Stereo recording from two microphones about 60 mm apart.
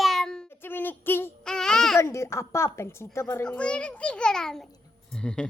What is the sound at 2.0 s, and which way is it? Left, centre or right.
Speech, left.